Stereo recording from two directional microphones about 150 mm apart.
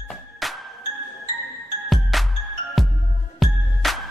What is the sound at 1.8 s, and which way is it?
Music, centre (ahead or behind).